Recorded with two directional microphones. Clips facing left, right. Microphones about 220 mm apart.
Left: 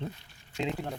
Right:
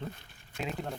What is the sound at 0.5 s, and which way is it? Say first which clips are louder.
Speech: left 5 dB; 20° left (ahead or behind).